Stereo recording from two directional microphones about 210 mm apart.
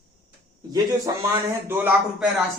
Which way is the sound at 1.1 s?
15° right (ahead or behind).